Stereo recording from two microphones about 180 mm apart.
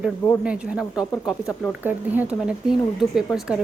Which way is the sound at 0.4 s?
5° right (ahead or behind).